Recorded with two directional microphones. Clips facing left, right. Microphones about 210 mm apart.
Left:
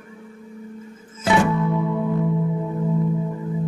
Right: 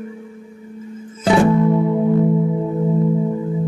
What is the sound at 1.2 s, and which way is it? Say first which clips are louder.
Music: right 6 dB; 35° right (ahead or behind).